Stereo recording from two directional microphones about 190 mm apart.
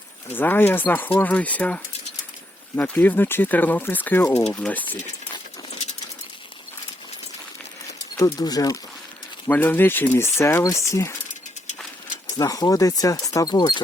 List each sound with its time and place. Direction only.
0.3 s speech: 10° left (ahead or behind)
8.1 s speech: 20° left (ahead or behind)
12.4 s speech: 20° left (ahead or behind)